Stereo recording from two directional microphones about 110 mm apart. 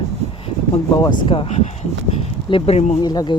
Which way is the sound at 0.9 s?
40° left (ahead or behind).